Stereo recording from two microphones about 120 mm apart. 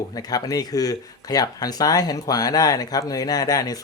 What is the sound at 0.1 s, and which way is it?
Speech, 30° left (ahead or behind).